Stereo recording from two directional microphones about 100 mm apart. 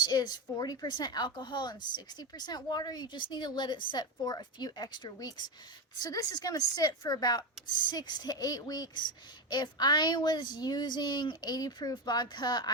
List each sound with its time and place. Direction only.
0.0 s speech: 45° left (ahead or behind)